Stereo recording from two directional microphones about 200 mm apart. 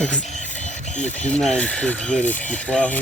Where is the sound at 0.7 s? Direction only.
35° left (ahead or behind).